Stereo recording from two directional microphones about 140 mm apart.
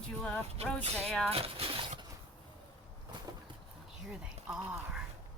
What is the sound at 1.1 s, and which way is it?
Speech, 5° left (ahead or behind).